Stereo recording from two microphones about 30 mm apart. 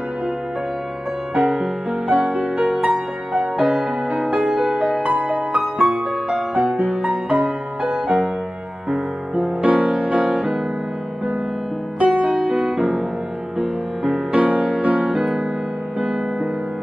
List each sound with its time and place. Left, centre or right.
1.3 s music: right
2.0 s music: right
2.6 s music: centre
5.0 s music: right
5.5 s music: right
7.0 s music: right
9.3 s music: right
10.2 s music: right
12.0 s music: right
12.6 s music: right
14.3 s music: right
15.0 s music: centre